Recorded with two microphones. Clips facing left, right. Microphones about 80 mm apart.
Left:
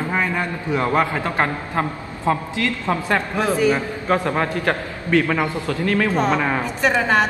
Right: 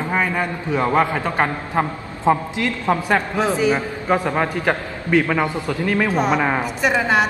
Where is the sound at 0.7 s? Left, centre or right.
Left.